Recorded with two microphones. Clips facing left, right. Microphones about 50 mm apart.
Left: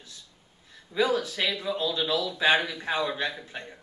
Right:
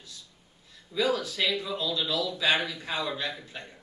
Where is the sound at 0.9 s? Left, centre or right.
Left.